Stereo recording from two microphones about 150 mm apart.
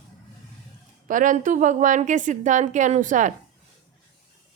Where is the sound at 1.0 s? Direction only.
60° right (ahead or behind).